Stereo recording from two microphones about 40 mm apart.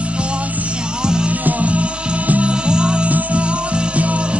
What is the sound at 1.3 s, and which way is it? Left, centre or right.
Music, right.